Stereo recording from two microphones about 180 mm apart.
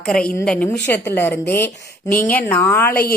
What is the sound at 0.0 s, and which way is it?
A woman's voice, 5° left (ahead or behind).